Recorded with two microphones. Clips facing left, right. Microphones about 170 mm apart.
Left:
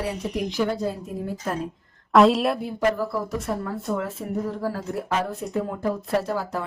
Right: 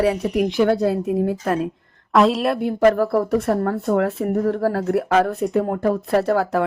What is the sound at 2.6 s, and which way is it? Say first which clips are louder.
Speech: right 8 dB; 65° right (ahead or behind).